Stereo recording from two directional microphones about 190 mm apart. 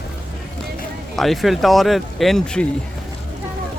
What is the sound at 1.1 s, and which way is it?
Speech, centre (ahead or behind).